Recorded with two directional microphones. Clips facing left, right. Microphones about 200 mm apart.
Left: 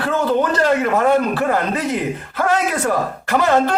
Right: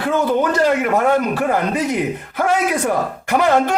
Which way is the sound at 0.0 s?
10° right (ahead or behind).